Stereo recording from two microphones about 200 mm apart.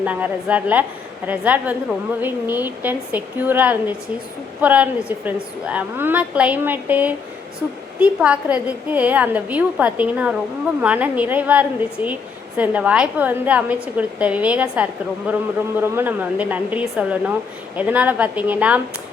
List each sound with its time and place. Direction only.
0.0 s a woman's voice: 5° right (ahead or behind)